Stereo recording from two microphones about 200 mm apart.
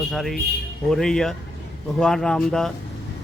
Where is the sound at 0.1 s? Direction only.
Centre (ahead or behind).